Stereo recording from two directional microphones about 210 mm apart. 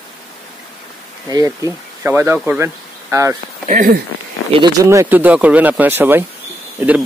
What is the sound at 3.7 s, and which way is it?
Speech, 40° right (ahead or behind).